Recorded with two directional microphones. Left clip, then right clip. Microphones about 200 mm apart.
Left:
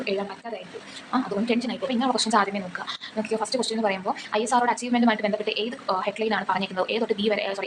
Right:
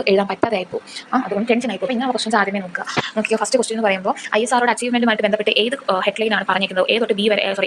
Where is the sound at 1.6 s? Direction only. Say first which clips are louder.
Right 5 dB; 10° right (ahead or behind).